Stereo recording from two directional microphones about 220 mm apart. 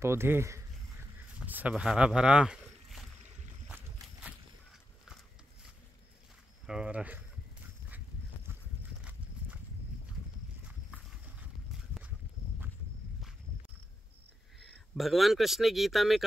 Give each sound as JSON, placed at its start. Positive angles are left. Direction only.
{"t": 0.0, "sound": "speech", "side_deg": -10}
{"t": 3.6, "sound": "boat", "side_deg": -5}
{"t": 6.6, "sound": "livestock", "side_deg": -5}
{"t": 10.9, "sound": "walk", "side_deg": -5}
{"t": 15.0, "sound": "speech", "side_deg": 0}